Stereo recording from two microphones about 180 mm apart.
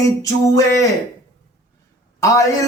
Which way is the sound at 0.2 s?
20° left (ahead or behind).